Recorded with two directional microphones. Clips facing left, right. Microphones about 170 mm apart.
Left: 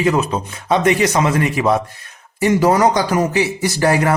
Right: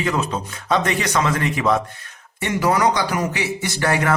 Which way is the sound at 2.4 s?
35° left (ahead or behind).